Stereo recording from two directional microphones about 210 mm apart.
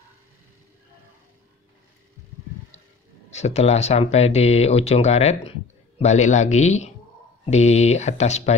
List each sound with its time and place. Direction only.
3.3 s speech: 30° left (ahead or behind)